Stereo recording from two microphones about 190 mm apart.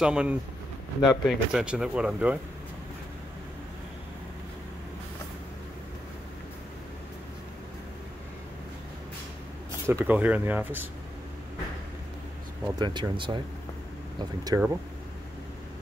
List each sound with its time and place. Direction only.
0.0 s speech: 5° right (ahead or behind)
9.8 s speech: 10° right (ahead or behind)
12.7 s speech: 20° right (ahead or behind)
14.5 s speech: 10° right (ahead or behind)